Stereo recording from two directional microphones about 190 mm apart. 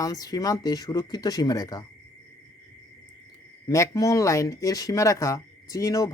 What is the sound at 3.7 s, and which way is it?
Speech, 15° left (ahead or behind).